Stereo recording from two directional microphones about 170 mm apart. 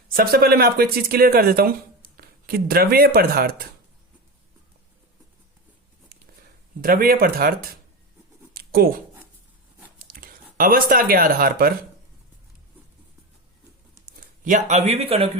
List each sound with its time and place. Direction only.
0.1 s speech: 60° right (ahead or behind)
6.8 s speech: 60° right (ahead or behind)
8.5 s writing: 60° right (ahead or behind)
10.0 s speech: 55° right (ahead or behind)
14.4 s speech: 45° right (ahead or behind)